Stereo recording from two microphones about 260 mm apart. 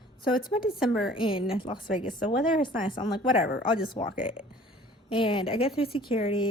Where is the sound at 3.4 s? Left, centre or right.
Left.